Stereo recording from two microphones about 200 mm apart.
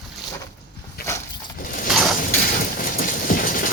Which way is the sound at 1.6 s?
40° left (ahead or behind).